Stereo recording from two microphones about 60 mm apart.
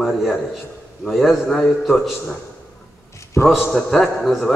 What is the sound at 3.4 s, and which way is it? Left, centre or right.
A man's voice, centre.